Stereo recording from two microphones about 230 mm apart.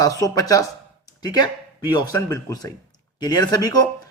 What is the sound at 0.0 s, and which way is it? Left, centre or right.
A man's voice, centre.